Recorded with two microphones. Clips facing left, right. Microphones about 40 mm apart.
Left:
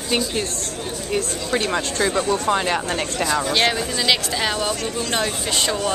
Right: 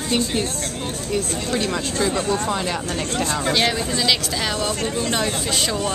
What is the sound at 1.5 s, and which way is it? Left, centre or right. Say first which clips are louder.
Speech: left 2 dB; left.